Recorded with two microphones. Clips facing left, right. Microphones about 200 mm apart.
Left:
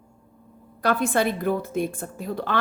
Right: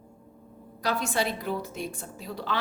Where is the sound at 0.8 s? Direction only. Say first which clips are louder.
Left 6 dB; 55° left (ahead or behind).